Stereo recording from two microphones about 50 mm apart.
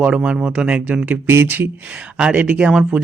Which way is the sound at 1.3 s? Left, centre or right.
Right.